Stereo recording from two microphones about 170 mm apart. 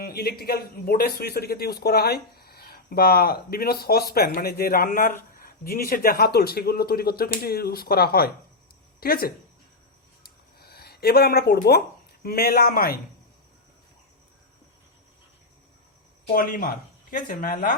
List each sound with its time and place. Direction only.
0.0 s a man's voice: 65° left (ahead or behind)
10.2 s a sound: 65° left (ahead or behind)
12.2 s a man's voice: 60° left (ahead or behind)
16.3 s a man's voice: 55° left (ahead or behind)